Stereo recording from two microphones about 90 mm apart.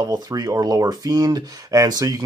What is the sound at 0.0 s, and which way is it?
Speech, 45° right (ahead or behind).